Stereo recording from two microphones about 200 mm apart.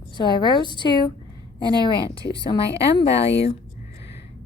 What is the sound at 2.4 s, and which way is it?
A woman's voice, 25° left (ahead or behind).